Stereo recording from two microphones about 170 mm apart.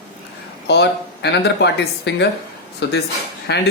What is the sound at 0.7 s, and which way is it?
A man's voice, 80° left.